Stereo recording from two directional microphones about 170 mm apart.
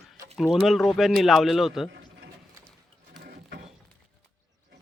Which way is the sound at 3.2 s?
60° right (ahead or behind).